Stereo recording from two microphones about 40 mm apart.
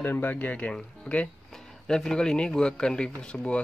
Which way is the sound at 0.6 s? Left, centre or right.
Left.